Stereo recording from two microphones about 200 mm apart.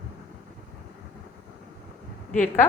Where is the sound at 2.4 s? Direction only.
10° left (ahead or behind).